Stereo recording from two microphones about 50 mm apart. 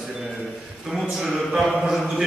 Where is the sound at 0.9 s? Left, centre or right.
Centre.